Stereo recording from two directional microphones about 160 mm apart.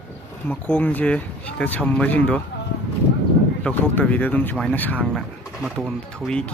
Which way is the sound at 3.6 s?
10° left (ahead or behind).